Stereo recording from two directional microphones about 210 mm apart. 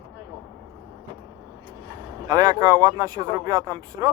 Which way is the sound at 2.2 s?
15° right (ahead or behind).